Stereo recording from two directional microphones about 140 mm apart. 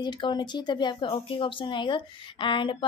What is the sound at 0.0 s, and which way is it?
Speech, 35° left (ahead or behind).